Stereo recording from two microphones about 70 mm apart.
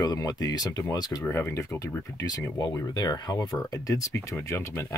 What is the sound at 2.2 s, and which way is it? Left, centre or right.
Speech, left.